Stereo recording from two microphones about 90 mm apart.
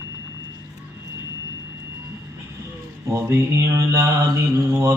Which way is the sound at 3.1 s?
30° right (ahead or behind).